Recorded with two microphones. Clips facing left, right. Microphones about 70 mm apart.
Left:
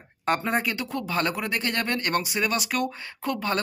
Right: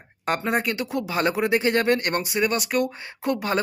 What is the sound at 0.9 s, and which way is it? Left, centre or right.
Speech, centre.